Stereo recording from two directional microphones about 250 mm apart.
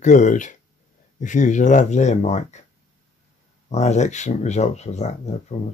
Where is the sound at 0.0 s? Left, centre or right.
Left.